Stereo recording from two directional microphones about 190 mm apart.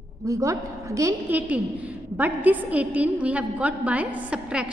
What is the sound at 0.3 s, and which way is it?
A woman's voice, 15° right (ahead or behind).